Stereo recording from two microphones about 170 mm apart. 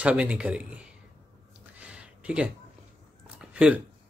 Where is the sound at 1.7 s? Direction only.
5° right (ahead or behind).